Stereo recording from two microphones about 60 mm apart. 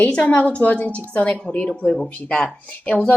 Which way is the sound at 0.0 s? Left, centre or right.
Left.